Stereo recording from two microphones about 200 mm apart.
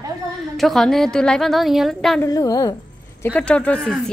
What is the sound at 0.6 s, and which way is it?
A woman's voice, centre (ahead or behind).